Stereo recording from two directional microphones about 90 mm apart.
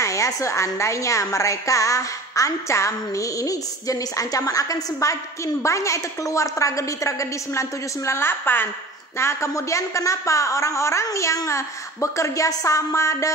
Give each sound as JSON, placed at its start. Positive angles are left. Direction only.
{"t": 0.0, "sound": "a woman's voice", "side_deg": 35}